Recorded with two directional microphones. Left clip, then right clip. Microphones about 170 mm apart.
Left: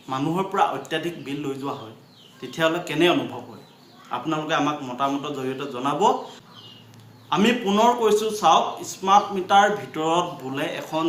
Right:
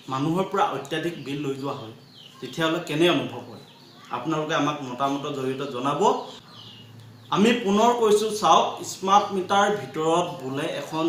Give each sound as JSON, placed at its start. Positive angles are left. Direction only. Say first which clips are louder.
{"t": 0.1, "sound": "a man's voice", "louder": "even", "side_deg": 0}
{"t": 7.3, "sound": "a man's voice", "louder": "even", "side_deg": 5}